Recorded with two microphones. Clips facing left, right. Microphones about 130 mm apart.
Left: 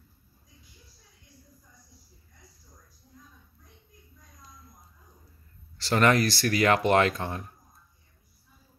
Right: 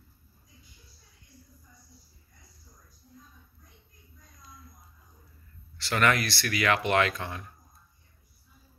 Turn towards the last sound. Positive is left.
turn(degrees=40)  # may be behind; listen again after turning